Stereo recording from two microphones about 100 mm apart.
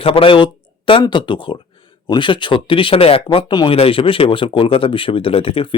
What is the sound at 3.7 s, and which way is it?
Speech, 65° left (ahead or behind).